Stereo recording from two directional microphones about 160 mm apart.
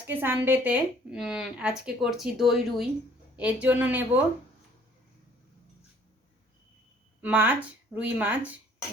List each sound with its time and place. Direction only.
0.1 s a woman's voice: 10° right (ahead or behind)
7.2 s speech: 10° right (ahead or behind)